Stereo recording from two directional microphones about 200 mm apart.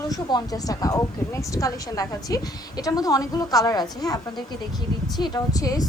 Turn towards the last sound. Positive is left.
turn(degrees=15)  # may be behind; listen again after turning